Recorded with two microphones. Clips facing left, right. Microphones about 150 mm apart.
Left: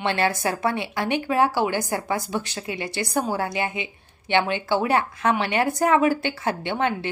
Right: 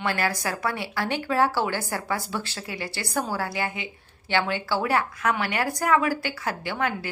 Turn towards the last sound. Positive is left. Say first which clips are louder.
# left 3 dB
turn(degrees=25)  # may be behind; listen again after turning